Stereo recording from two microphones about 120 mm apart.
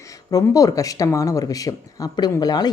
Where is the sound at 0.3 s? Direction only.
30° left (ahead or behind).